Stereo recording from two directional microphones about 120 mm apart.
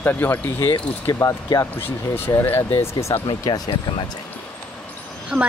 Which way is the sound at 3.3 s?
35° left (ahead or behind).